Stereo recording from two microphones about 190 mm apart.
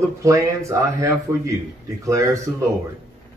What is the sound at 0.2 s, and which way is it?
Speech, 15° right (ahead or behind).